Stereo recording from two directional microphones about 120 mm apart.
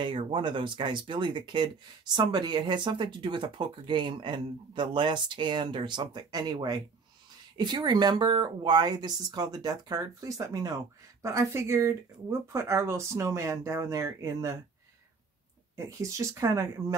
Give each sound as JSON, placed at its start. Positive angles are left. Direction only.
{"t": 0.0, "sound": "speech", "side_deg": -45}
{"t": 15.7, "sound": "speech", "side_deg": -25}